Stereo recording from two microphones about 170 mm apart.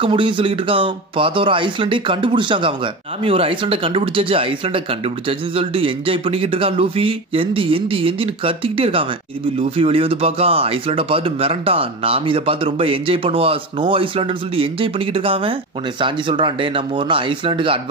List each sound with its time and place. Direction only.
0.0 s speech: 30° right (ahead or behind)